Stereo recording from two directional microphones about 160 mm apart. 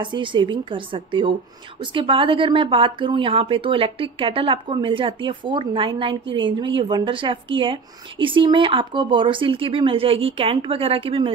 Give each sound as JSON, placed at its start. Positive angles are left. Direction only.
{"t": 0.0, "sound": "a woman's voice", "side_deg": -30}